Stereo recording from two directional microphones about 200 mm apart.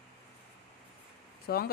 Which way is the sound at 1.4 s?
50° left (ahead or behind).